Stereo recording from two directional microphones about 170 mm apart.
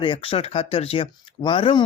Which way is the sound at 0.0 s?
30° left (ahead or behind).